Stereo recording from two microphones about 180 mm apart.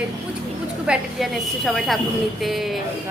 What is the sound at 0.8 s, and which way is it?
A woman's voice, 5° right (ahead or behind).